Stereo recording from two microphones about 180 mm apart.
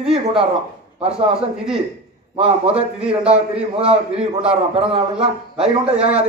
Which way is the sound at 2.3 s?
30° right (ahead or behind).